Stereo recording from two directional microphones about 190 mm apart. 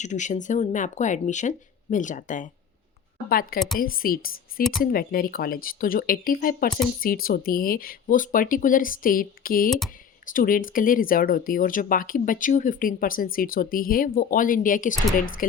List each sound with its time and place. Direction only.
0.0 s speech: 40° left (ahead or behind)
9.6 s speech: centre (ahead or behind)
10.3 s speech: 45° left (ahead or behind)